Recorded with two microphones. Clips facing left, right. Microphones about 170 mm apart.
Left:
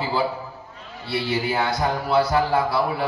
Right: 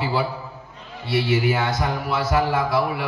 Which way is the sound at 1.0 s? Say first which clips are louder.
Right 4 dB; 30° left (ahead or behind).